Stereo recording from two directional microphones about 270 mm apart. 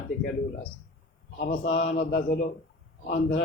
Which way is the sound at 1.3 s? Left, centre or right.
Left.